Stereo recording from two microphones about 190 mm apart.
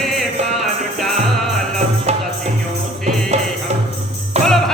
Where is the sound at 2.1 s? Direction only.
35° right (ahead or behind).